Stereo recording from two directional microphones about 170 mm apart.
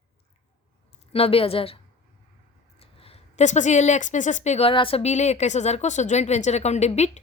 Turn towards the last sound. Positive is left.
turn(degrees=40)  # may be behind; listen again after turning